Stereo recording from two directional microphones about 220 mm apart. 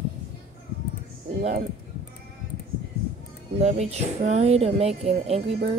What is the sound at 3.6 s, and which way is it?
Speech, 30° right (ahead or behind).